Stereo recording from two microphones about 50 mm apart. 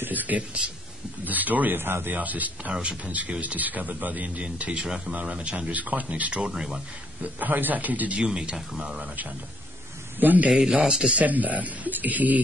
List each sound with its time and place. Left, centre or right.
0.0 s a sound: right
0.6 s speech: centre
1.2 s speech: right
2.1 s speech: right
2.7 s speech: centre
3.3 s speech: right
4.8 s speech: centre
5.1 s speech: right
6.4 s speech: centre
7.3 s speech: right
8.2 s speech: centre
10.2 s speech: right
10.5 s speech: centre
11.1 s speech: right